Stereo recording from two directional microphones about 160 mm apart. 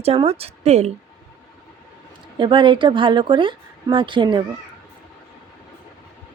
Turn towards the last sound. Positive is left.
turn(degrees=-30)  # may be behind; listen again after turning